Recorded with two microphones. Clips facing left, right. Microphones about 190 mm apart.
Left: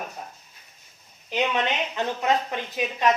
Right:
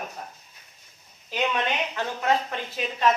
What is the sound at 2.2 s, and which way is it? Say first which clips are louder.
Speech: right 1 dB; 15° left (ahead or behind).